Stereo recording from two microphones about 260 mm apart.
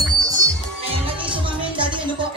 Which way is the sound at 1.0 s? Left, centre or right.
Centre.